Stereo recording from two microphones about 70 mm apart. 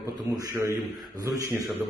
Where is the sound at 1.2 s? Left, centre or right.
Right.